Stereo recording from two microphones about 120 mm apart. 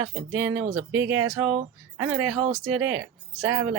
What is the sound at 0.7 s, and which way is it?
Speech, 10° right (ahead or behind).